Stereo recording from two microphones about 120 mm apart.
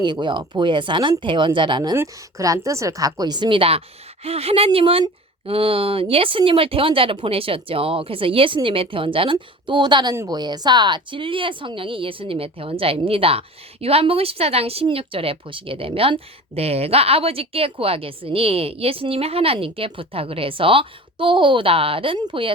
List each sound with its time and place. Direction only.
0.0 s speech: 40° right (ahead or behind)